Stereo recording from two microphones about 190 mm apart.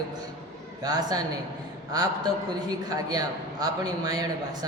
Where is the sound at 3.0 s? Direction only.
20° right (ahead or behind).